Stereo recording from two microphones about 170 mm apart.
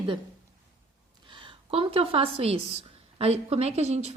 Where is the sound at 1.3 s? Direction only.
30° right (ahead or behind).